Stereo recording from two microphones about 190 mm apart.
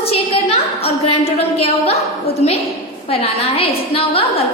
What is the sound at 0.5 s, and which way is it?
A woman's voice, 30° left (ahead or behind).